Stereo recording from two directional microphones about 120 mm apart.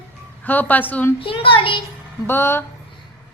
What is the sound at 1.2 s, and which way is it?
Speech, 45° left (ahead or behind).